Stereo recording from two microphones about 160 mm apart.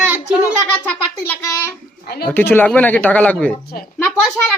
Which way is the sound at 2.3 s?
10° left (ahead or behind).